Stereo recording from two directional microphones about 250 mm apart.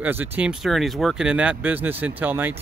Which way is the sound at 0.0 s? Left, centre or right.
Centre.